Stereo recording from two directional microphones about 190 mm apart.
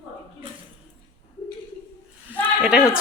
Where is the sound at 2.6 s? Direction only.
5° right (ahead or behind).